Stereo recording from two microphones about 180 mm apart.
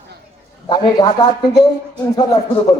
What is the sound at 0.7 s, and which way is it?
Music, 20° left (ahead or behind).